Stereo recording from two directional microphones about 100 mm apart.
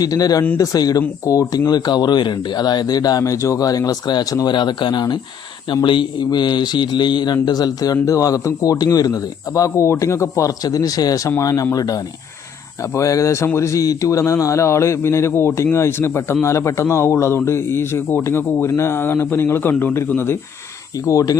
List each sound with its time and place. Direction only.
0.0 s a man's voice: 40° left (ahead or behind)